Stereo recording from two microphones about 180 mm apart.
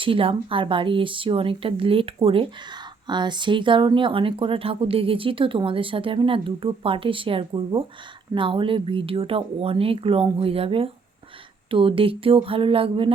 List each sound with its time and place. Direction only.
0.0 s speech: 30° right (ahead or behind)